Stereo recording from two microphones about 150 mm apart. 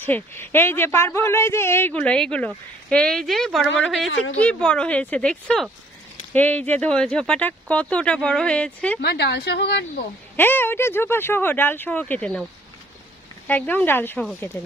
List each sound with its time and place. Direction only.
0.0 s speech: 15° left (ahead or behind)
9.0 s a woman's voice: 90° left
10.3 s speech: 15° left (ahead or behind)
13.5 s speech: 10° left (ahead or behind)